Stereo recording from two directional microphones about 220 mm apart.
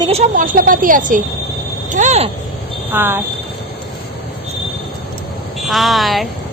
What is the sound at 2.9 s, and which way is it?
Speech, 10° right (ahead or behind).